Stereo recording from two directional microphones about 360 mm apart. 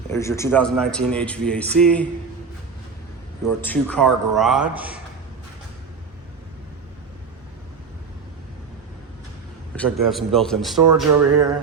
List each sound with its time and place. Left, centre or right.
0.1 s speech: centre
3.4 s speech: centre
9.7 s speech: centre
11.1 s music: right